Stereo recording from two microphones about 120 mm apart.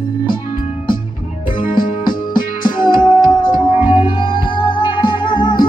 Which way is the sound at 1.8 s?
40° left (ahead or behind).